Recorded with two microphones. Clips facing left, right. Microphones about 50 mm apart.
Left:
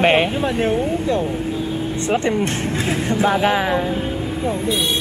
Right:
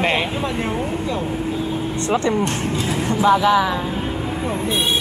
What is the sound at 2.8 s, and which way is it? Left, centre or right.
Speech, left.